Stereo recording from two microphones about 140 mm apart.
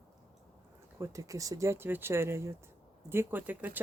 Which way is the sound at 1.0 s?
25° right (ahead or behind).